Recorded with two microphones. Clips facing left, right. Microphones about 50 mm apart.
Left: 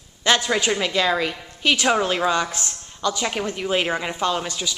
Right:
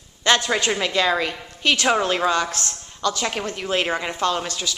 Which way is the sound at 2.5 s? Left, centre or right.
Centre.